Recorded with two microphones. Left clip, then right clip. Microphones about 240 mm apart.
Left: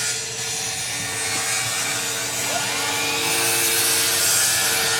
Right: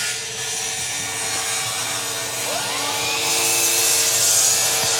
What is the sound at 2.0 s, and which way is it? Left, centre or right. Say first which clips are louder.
Helicopter: even; left.